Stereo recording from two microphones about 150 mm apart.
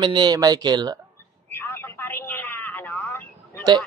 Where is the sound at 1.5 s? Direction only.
15° left (ahead or behind).